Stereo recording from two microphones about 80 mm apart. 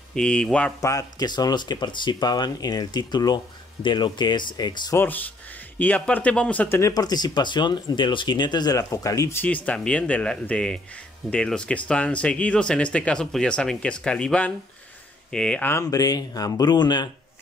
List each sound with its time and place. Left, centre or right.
0.1 s speech: centre
0.7 s speech: left
1.2 s speech: left
3.8 s speech: left
4.9 s speech: left
6.9 s speech: left
8.7 s speech: left
9.3 s speech: left
15.8 s speech: left